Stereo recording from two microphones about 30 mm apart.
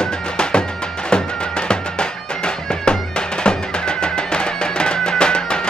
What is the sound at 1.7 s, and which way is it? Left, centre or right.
Music, left.